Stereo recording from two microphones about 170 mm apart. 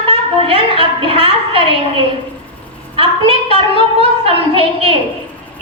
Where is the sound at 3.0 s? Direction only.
30° right (ahead or behind).